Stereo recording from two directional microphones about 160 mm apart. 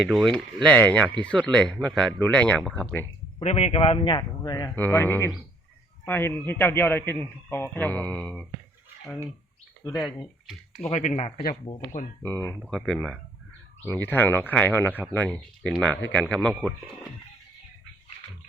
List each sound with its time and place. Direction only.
0.0 s a man's voice: 5° right (ahead or behind)
3.4 s speech: 40° left (ahead or behind); by 4.7 s 25° left (ahead or behind)
4.7 s a man's voice: 10° left (ahead or behind)
10.4 s a sound: centre (ahead or behind)
10.9 s speech: 40° left (ahead or behind)
11.7 s speech: 30° left (ahead or behind)
12.2 s a man's voice: 15° left (ahead or behind)
12.5 s a man's voice: centre (ahead or behind)